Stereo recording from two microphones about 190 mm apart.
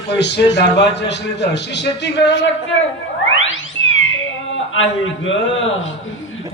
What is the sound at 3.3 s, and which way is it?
Theremin, 90° left.